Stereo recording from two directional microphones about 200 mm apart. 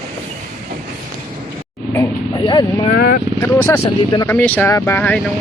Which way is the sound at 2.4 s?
25° left (ahead or behind).